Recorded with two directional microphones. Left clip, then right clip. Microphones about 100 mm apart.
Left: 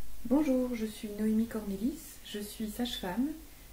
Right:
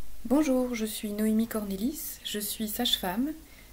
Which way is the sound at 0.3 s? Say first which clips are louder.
Right 3 dB; 20° right (ahead or behind).